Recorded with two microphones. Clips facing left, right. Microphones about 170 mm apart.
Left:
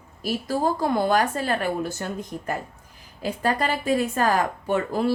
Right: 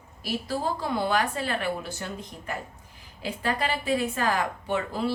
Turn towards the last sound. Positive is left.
turn(degrees=45)  # may be behind; listen again after turning